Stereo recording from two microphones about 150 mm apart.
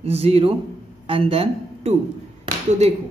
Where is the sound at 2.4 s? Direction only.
50° right (ahead or behind).